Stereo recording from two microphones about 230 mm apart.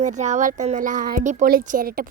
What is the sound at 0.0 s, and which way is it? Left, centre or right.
A woman's voice, right.